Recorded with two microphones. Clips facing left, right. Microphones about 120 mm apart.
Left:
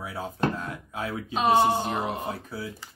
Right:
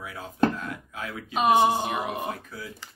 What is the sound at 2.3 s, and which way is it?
Speech, 30° left (ahead or behind).